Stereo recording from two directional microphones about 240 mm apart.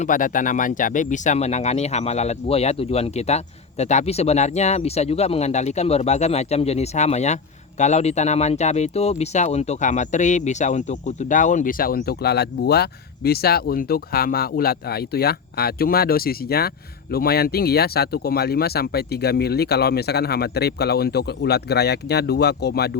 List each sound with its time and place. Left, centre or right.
0.0 s speech: left